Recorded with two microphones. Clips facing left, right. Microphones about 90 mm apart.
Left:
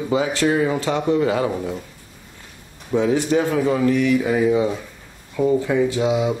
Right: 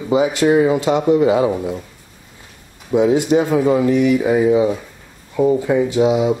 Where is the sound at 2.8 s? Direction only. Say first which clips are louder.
Right 4 dB; 15° right (ahead or behind).